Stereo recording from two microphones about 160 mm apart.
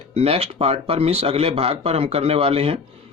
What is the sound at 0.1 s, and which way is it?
Speech, 40° right (ahead or behind).